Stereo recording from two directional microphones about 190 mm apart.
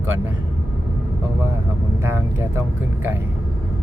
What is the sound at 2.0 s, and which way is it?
Speech, 15° right (ahead or behind).